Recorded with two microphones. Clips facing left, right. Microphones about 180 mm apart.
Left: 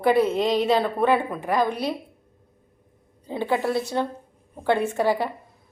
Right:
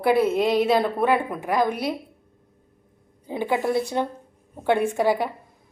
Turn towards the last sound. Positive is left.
turn(degrees=-15)  # may be behind; listen again after turning